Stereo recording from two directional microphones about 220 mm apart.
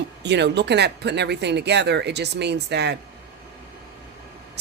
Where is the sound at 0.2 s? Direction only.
50° right (ahead or behind).